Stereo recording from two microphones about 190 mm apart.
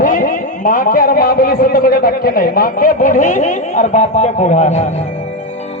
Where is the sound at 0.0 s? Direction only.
45° left (ahead or behind).